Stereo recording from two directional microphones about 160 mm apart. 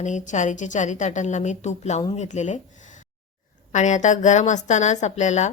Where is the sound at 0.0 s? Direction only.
50° left (ahead or behind).